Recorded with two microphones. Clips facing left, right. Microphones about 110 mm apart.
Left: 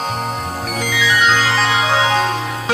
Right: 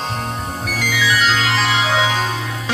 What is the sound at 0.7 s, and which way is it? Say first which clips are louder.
Music: even; 25° left (ahead or behind).